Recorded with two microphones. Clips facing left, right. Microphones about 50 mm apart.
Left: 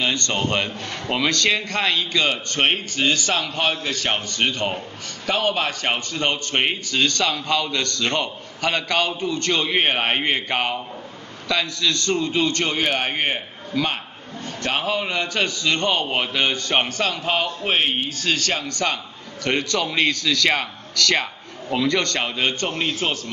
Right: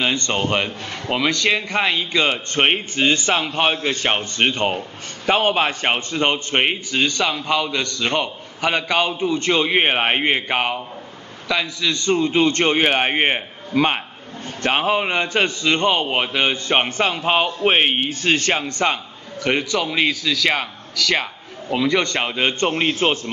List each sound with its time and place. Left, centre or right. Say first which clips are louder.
0.0 s a man's voice: right 2 dB; right
19.4 s a man's voice: right 2 dB; centre; by 23.3 s right